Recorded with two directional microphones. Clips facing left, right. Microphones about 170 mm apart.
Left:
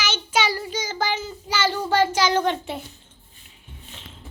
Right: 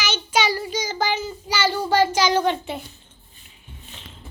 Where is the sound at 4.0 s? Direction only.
Centre (ahead or behind).